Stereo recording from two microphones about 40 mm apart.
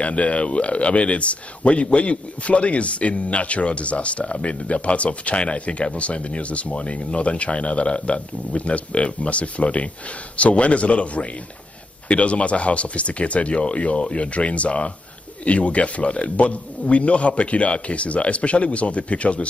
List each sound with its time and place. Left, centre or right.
0.0 s speech: left